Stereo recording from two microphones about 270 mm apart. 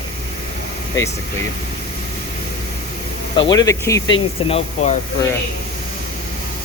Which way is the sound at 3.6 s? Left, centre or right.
Centre.